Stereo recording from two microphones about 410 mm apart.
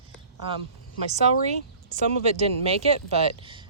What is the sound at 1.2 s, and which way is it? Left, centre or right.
Speech, centre.